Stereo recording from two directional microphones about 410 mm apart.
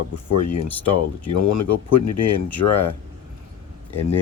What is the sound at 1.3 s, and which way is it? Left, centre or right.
Speech, left.